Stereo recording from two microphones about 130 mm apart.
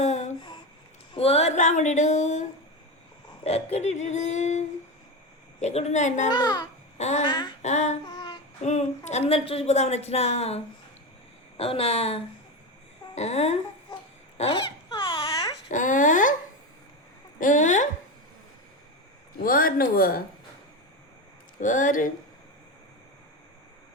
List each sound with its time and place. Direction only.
0.0 s a sound: 65° left (ahead or behind)
1.1 s a sound: 50° left (ahead or behind); by 2.5 s 65° left (ahead or behind)
3.4 s a woman's voice: 55° left (ahead or behind)
6.2 s a child's voice: 30° left (ahead or behind)
7.6 s a woman's voice: 60° left (ahead or behind)
8.0 s child singing: 35° left (ahead or behind)
8.6 s a woman's voice: 60° left (ahead or behind)
14.8 s a sound: 40° left (ahead or behind)
15.7 s speech: 80° left
17.4 s a sound: 80° left
19.4 s a man's voice: 90° left
21.6 s speech: 80° left